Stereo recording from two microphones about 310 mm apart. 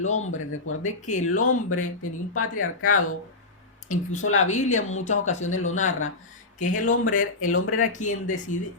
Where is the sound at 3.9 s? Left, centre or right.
Left.